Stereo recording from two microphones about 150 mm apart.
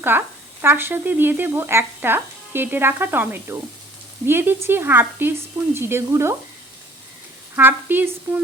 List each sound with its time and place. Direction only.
0.0 s speech: 15° right (ahead or behind)
7.5 s speech: 15° right (ahead or behind)